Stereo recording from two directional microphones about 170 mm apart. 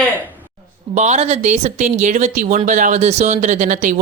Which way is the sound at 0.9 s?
40° right (ahead or behind).